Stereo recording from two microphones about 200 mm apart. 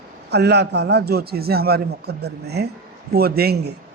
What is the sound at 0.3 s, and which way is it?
A man's voice, 55° right (ahead or behind).